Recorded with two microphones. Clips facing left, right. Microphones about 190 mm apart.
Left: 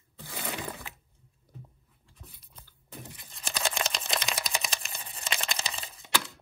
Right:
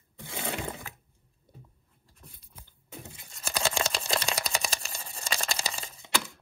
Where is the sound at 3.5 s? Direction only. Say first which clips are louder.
Right 3 dB; 30° right (ahead or behind).